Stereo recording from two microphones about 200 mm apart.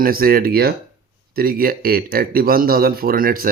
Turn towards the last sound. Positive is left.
turn(degrees=-45)  # may be behind; listen again after turning